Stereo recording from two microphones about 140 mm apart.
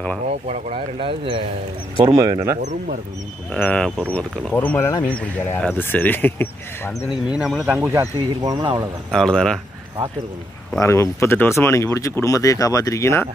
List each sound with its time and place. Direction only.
0.3 s speech: 50° right (ahead or behind)
2.1 s speech: 20° right (ahead or behind)
2.6 s speech: 60° right (ahead or behind)
3.5 s speech: 10° left (ahead or behind)
7.1 s speech: 5° right (ahead or behind)
7.9 s speech: 25° right (ahead or behind)
9.1 s speech: 5° left (ahead or behind)
10.8 s speech: 20° left (ahead or behind)